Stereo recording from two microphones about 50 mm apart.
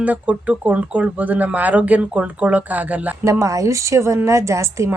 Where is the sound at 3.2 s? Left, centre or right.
Right.